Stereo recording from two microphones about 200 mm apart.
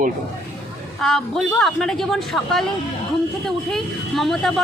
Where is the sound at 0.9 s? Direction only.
Centre (ahead or behind).